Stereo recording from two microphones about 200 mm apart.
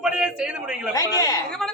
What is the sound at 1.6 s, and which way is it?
Speech, centre (ahead or behind).